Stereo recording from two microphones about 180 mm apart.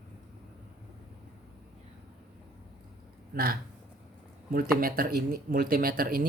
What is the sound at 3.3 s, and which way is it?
Speech, 55° right (ahead or behind).